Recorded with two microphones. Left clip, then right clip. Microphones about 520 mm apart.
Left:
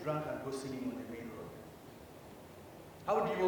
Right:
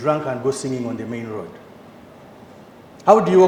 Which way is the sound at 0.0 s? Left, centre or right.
Right.